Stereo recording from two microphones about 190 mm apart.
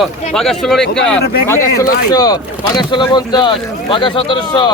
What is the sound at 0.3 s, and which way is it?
Speech, centre (ahead or behind).